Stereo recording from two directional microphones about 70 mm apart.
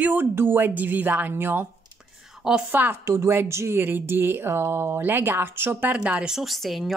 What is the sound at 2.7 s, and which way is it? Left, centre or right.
Speech, right.